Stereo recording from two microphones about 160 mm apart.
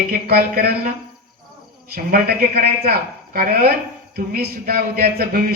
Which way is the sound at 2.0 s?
70° right (ahead or behind).